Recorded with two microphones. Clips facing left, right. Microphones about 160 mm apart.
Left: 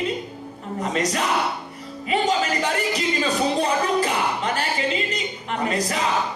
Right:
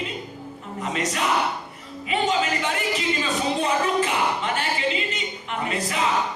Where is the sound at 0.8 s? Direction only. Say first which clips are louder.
Left 2 dB; 40° left (ahead or behind).